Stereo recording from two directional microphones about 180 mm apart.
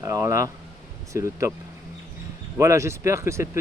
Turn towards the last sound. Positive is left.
turn(degrees=-15)  # may be behind; listen again after turning